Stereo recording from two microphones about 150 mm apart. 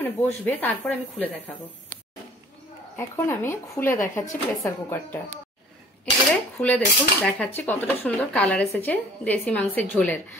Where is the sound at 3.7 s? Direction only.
15° left (ahead or behind).